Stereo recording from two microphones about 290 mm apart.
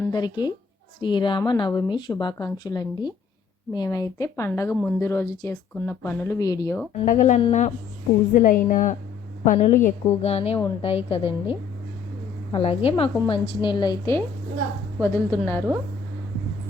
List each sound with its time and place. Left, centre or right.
0.0 s speech: centre
7.0 s a woman's voice: left; by 15.6 s centre